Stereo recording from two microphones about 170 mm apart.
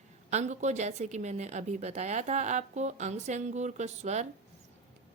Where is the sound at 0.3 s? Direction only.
45° right (ahead or behind).